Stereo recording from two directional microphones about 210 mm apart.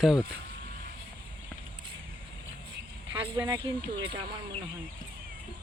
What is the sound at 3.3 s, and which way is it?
Speech, 15° right (ahead or behind).